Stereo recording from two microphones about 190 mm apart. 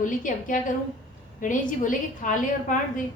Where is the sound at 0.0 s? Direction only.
45° left (ahead or behind).